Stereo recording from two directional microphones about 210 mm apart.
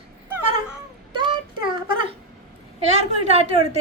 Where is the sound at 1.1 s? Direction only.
25° right (ahead or behind).